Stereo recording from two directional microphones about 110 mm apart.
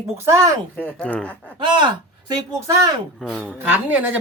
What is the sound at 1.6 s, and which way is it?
Speech, 45° right (ahead or behind).